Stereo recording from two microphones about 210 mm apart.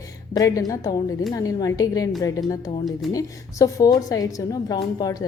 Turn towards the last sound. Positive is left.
turn(degrees=20)  # may be behind; listen again after turning